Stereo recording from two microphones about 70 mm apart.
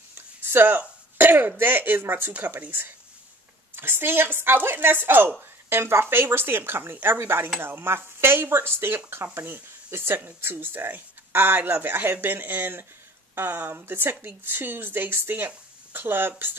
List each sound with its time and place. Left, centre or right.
0.1 s throat clearing: right
1.6 s speech: right